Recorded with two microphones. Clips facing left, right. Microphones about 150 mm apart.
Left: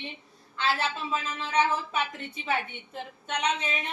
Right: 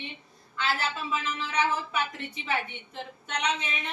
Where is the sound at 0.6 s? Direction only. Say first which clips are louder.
Left 1 dB; 30° left (ahead or behind).